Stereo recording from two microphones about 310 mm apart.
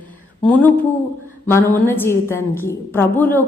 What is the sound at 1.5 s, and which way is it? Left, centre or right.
A woman's voice, centre.